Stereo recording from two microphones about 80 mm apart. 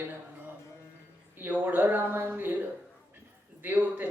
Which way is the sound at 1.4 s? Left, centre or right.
Right.